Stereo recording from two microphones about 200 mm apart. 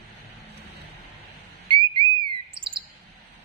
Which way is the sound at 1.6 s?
25° right (ahead or behind).